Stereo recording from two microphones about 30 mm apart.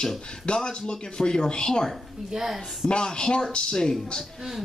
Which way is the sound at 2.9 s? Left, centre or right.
Left.